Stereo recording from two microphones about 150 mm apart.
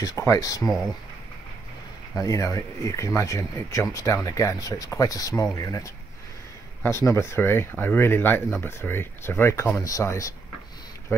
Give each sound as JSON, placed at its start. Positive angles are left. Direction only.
{"t": 0.0, "sound": "speech", "side_deg": 20}
{"t": 2.1, "sound": "speech", "side_deg": 20}